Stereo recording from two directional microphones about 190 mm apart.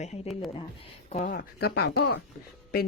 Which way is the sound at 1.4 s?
55° left (ahead or behind).